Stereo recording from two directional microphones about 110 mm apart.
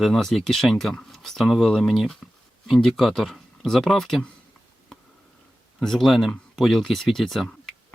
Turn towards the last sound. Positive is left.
turn(degrees=0)  # may be behind; listen again after turning